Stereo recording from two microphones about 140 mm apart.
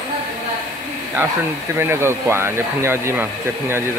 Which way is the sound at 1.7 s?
20° right (ahead or behind).